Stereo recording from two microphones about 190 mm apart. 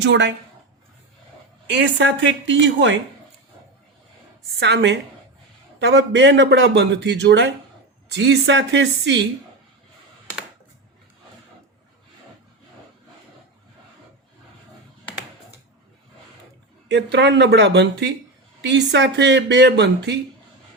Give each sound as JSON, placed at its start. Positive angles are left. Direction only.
{"t": 0.0, "sound": "speech", "side_deg": -70}
{"t": 1.6, "sound": "speech", "side_deg": -65}
{"t": 4.6, "sound": "speech", "side_deg": -65}
{"t": 16.9, "sound": "speech", "side_deg": -65}